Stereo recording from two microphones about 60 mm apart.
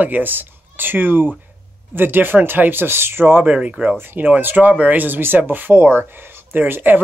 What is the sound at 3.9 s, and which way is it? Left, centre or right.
Speech, right.